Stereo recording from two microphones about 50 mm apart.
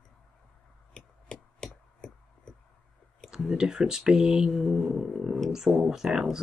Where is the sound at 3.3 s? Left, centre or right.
Centre.